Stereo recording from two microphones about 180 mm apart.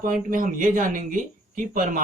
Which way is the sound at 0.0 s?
50° right (ahead or behind).